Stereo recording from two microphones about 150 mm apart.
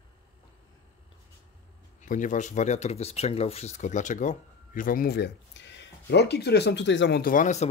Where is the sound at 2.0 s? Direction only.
55° left (ahead or behind); by 6.6 s 90° left.